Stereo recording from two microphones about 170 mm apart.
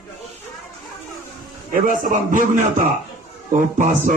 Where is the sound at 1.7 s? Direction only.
50° right (ahead or behind).